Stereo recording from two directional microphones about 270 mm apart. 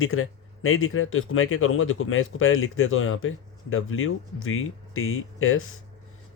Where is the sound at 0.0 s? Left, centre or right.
Left.